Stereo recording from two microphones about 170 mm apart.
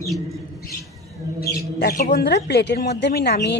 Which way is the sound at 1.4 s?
65° left (ahead or behind).